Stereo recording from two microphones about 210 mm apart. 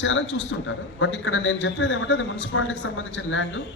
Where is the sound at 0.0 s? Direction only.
65° left (ahead or behind).